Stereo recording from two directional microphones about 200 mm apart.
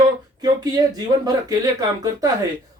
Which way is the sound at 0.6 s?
20° right (ahead or behind).